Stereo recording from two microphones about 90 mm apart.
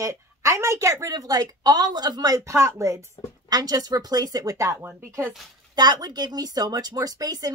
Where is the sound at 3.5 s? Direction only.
45° right (ahead or behind).